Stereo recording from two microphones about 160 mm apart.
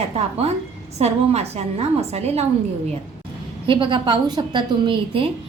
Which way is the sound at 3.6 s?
30° right (ahead or behind).